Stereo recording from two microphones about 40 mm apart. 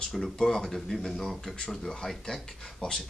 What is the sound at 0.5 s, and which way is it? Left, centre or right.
Speech, centre.